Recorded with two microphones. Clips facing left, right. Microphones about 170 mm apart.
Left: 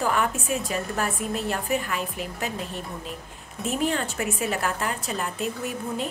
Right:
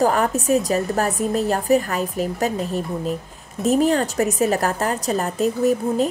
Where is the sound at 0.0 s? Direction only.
40° right (ahead or behind).